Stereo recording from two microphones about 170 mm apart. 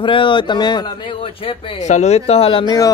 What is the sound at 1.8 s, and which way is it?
Speech, 45° left (ahead or behind).